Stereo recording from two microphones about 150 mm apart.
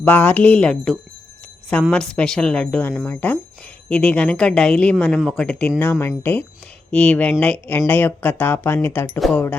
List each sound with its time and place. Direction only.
0.0 s speech: 10° left (ahead or behind)